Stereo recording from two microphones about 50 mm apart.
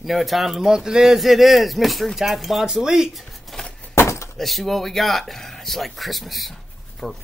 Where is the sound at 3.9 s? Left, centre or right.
Left.